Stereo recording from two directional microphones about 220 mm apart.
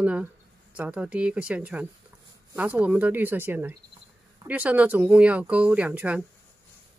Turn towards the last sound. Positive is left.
turn(degrees=-5)  # may be behind; listen again after turning